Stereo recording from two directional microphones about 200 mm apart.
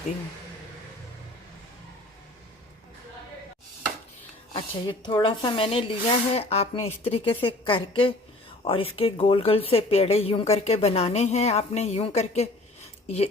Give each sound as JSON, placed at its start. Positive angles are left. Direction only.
{"t": 4.5, "sound": "speech", "side_deg": 25}